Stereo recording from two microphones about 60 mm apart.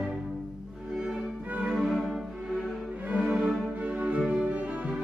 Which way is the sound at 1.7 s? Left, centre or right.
Centre.